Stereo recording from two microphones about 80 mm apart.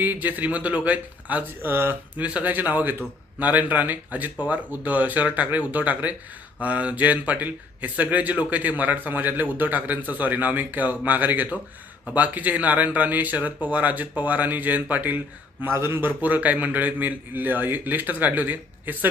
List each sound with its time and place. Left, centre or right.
0.0 s a man's voice: right